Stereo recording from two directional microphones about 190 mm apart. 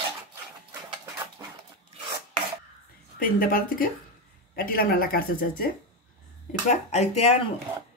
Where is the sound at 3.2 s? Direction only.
50° left (ahead or behind).